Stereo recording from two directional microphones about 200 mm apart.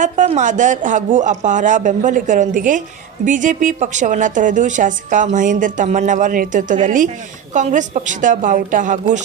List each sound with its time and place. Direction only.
0.0 s a woman's voice: 35° right (ahead or behind)